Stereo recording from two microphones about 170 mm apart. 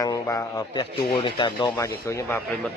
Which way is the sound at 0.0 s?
20° left (ahead or behind).